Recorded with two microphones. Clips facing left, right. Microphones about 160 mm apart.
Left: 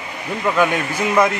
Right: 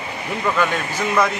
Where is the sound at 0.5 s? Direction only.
10° left (ahead or behind).